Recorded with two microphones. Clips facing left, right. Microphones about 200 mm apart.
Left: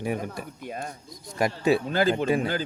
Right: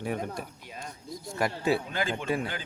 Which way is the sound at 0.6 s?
50° left (ahead or behind).